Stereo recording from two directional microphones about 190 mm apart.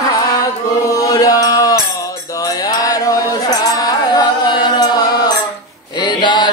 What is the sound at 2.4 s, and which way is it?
Music, 20° left (ahead or behind).